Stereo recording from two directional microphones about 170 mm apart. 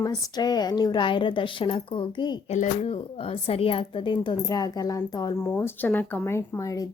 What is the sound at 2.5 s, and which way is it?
Speech, 40° left (ahead or behind).